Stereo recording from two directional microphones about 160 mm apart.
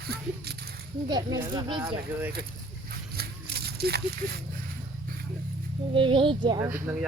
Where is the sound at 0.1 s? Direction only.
80° right.